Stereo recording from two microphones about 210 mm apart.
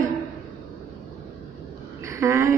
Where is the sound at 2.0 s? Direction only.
15° right (ahead or behind).